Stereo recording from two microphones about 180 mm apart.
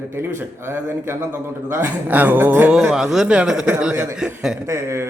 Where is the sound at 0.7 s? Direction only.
15° right (ahead or behind).